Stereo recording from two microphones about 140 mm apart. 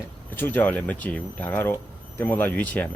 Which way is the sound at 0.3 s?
15° left (ahead or behind).